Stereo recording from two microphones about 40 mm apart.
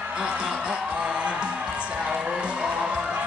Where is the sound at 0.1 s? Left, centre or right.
Right.